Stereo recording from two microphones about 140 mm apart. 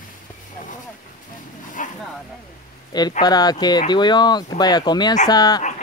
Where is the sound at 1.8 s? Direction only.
65° left (ahead or behind).